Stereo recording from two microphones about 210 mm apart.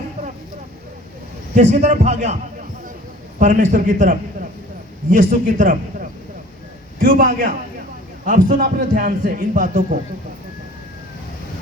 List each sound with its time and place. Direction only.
1.5 s a man's voice: 35° right (ahead or behind)